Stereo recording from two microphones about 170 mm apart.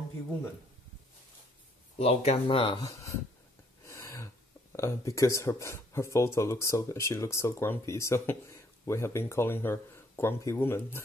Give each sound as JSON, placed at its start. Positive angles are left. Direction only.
{"t": 2.0, "sound": "speech", "side_deg": 35}
{"t": 3.8, "sound": "a sound", "side_deg": 20}
{"t": 4.7, "sound": "speech", "side_deg": 20}